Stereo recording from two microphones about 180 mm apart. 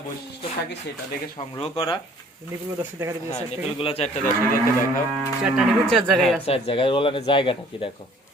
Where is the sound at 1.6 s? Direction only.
30° left (ahead or behind).